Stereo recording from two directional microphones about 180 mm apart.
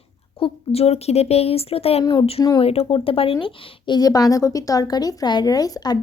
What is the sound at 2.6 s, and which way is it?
A woman's voice, 30° left (ahead or behind).